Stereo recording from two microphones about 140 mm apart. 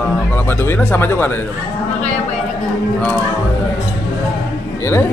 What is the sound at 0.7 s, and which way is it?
Speech, 15° left (ahead or behind).